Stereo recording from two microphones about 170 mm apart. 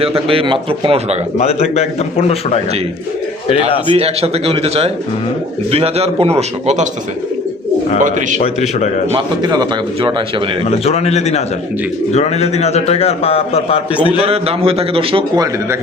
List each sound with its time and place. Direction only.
0.3 s a man's voice: 30° right (ahead or behind)
1.4 s a man's voice: 40° left (ahead or behind)
3.8 s a man's voice: 35° right (ahead or behind)
7.9 s a man's voice: 50° right (ahead or behind)
8.4 s a man's voice: 45° left (ahead or behind)
9.1 s a man's voice: 25° right (ahead or behind)
10.7 s a man's voice: 40° left (ahead or behind)
14.0 s a man's voice: 35° right (ahead or behind)